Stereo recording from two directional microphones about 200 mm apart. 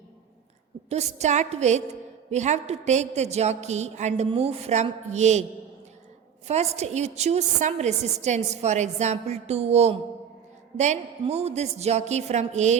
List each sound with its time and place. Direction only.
0.9 s a woman's voice: 35° right (ahead or behind)
6.5 s a woman's voice: 35° right (ahead or behind)